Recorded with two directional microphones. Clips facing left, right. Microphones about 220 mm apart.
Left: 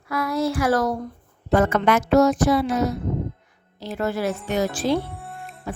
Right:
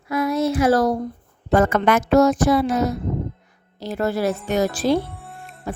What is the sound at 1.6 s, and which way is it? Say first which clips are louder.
Speech: right 2 dB; 50° right (ahead or behind).